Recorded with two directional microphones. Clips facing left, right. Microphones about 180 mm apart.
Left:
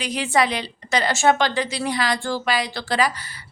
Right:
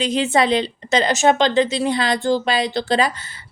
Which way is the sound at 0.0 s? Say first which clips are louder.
Right 4 dB; 25° right (ahead or behind).